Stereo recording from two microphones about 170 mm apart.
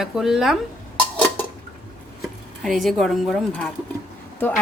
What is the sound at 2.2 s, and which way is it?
Speech, centre (ahead or behind).